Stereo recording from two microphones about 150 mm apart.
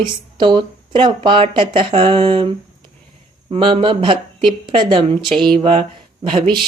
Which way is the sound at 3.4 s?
35° right (ahead or behind).